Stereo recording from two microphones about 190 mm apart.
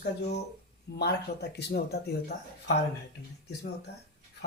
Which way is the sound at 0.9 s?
60° left (ahead or behind).